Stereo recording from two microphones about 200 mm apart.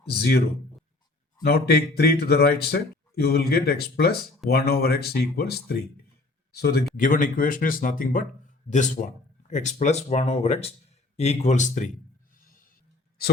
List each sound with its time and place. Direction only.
0.1 s speech: 50° left (ahead or behind)
1.5 s speech: 50° left (ahead or behind)
6.9 s speech: 40° left (ahead or behind)